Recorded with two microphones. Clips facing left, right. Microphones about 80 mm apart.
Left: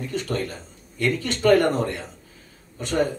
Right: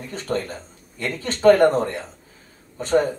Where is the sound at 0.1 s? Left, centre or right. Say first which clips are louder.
Right 3 dB; right.